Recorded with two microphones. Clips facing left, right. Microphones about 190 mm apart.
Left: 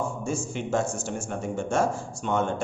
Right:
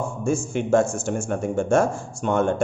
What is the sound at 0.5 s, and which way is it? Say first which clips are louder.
Speech: right 8 dB; 50° right (ahead or behind).